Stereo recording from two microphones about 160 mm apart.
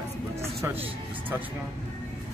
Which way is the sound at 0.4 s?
15° right (ahead or behind).